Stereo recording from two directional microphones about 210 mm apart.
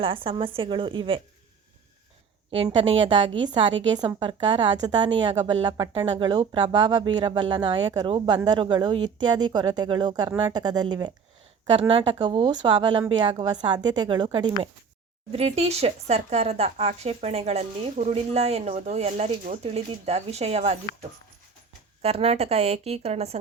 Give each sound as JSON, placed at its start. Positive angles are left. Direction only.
{"t": 0.0, "sound": "speech", "side_deg": -25}
{"t": 2.5, "sound": "speech", "side_deg": -25}
{"t": 2.8, "sound": "a woman's voice", "side_deg": -65}
{"t": 3.8, "sound": "speech", "side_deg": -20}
{"t": 22.0, "sound": "speech", "side_deg": -30}